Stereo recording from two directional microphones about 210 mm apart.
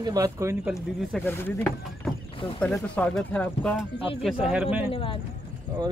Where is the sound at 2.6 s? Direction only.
5° left (ahead or behind).